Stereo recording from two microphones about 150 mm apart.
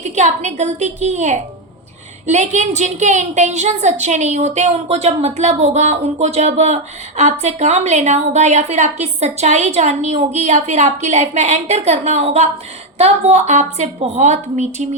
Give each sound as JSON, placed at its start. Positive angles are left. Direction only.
{"t": 0.0, "sound": "a woman's voice", "side_deg": -50}